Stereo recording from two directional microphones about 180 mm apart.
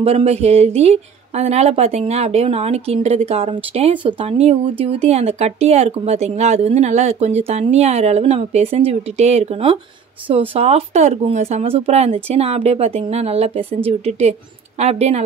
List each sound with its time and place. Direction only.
0.0 s speech: 35° right (ahead or behind)